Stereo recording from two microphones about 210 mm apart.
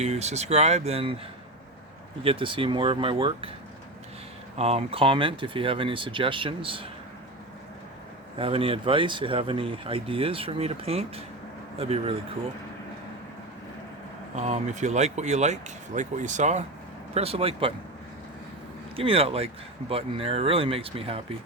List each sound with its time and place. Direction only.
0.0 s speech: 30° right (ahead or behind)
2.2 s speech: 25° right (ahead or behind)
4.5 s speech: 30° right (ahead or behind)
8.4 s speech: 25° right (ahead or behind)
14.3 s speech: 35° right (ahead or behind)
18.9 s speech: 25° right (ahead or behind)